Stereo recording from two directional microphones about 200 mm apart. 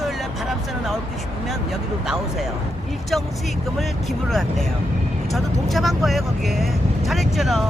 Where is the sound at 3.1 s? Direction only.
Centre (ahead or behind).